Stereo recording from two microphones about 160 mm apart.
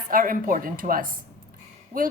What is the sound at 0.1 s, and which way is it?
A woman's voice, 60° right (ahead or behind).